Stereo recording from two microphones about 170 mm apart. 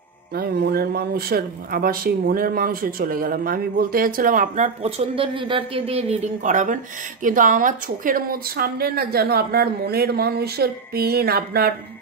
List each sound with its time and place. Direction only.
0.3 s a woman's voice: 65° right (ahead or behind)
4.8 s a woman's voice: 35° right (ahead or behind); by 11.7 s 65° right (ahead or behind)